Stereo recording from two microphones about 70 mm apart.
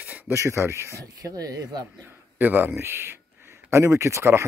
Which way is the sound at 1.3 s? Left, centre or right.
Right.